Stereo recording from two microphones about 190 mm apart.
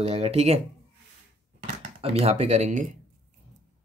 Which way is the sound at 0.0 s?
30° right (ahead or behind).